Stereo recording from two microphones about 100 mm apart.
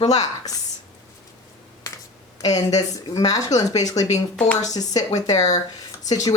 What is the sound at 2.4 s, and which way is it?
Speech, 35° left (ahead or behind).